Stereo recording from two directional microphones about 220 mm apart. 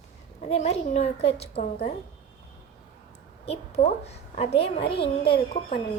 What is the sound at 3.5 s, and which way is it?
A child's voice, 30° left (ahead or behind).